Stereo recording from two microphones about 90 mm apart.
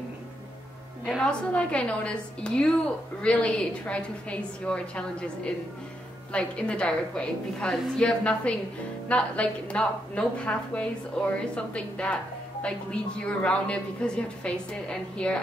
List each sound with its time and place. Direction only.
1.2 s a woman's voice: 10° left (ahead or behind)
13.4 s a woman's voice: 10° left (ahead or behind)